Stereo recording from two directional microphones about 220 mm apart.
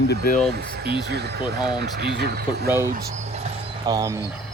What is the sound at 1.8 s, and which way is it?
Speech, 50° right (ahead or behind).